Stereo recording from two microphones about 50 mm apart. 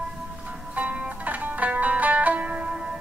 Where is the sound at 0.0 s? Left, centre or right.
Right.